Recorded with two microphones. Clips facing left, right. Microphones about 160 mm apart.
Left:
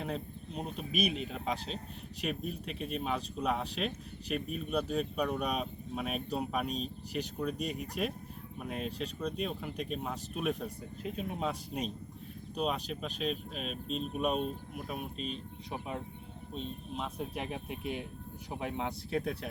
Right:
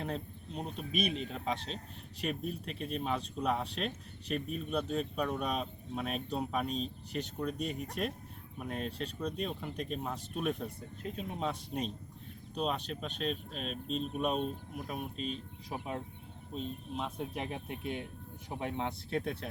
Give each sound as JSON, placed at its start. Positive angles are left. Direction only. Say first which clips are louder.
{"t": 0.0, "sound": "speech", "louder": "left 1 dB", "side_deg": 5}
{"t": 5.1, "sound": "speech", "louder": "left 1 dB", "side_deg": 10}